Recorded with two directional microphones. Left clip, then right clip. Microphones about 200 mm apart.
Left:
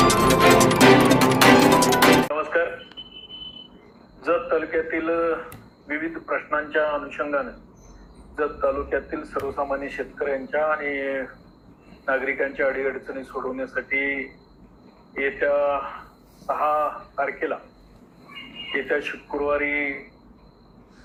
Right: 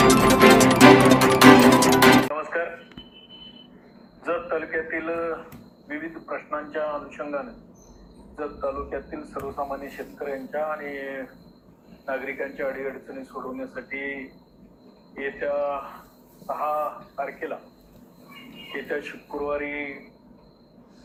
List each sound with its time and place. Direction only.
0.1 s music: centre (ahead or behind)
2.3 s music: 30° left (ahead or behind)
4.2 s a man's voice: 30° left (ahead or behind)